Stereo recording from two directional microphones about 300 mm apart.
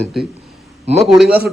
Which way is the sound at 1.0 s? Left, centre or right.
Centre.